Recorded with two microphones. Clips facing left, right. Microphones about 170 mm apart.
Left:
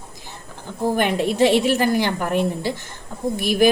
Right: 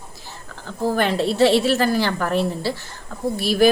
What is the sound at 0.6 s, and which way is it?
A woman's voice, 15° left (ahead or behind).